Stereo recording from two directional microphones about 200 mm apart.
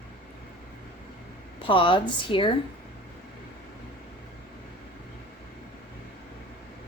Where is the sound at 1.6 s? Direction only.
25° left (ahead or behind).